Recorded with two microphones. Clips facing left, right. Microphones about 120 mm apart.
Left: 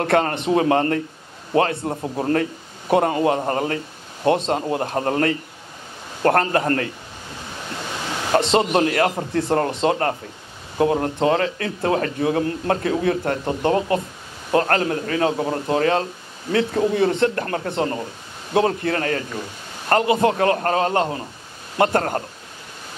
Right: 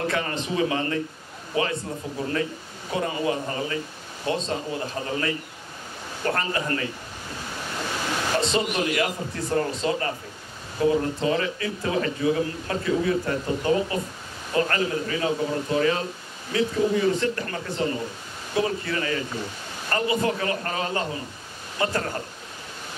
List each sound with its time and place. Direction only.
0.0 s a man's voice: 60° left (ahead or behind)
8.4 s a man's voice: 65° left (ahead or behind)